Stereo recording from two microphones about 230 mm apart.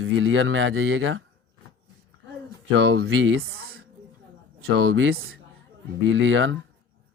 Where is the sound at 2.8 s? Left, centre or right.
Right.